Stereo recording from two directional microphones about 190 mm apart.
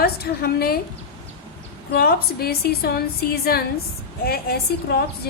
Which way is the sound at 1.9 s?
55° left (ahead or behind).